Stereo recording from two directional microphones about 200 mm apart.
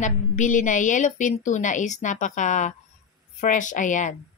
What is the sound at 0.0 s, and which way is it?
A woman's voice, 40° left (ahead or behind).